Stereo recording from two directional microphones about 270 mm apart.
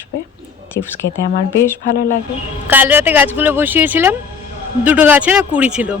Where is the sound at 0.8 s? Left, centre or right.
Left.